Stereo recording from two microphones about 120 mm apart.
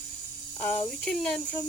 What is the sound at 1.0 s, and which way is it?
Speech, 5° left (ahead or behind).